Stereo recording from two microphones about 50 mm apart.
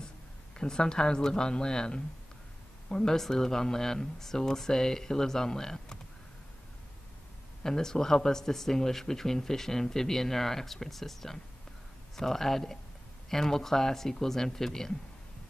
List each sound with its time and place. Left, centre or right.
0.6 s speech: centre
7.6 s speech: centre